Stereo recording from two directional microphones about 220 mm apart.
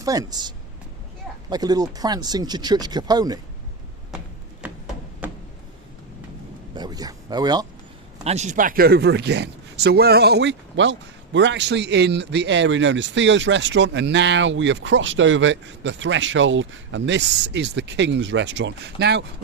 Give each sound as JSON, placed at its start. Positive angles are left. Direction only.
{"t": 0.0, "sound": "speech", "side_deg": -15}
{"t": 4.6, "sound": "a sound", "side_deg": -5}
{"t": 6.7, "sound": "speech", "side_deg": -20}
{"t": 8.2, "sound": "speech", "side_deg": -30}